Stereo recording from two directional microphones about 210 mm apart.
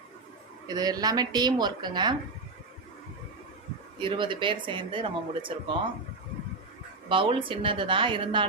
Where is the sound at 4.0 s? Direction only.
25° right (ahead or behind).